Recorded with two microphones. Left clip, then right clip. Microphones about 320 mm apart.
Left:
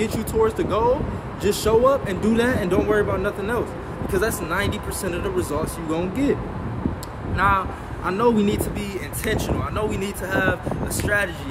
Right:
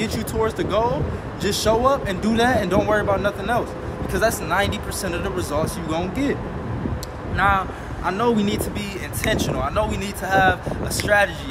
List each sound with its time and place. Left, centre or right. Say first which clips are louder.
0.0 s speech: left 2 dB; centre
7.3 s speech: right 1 dB; centre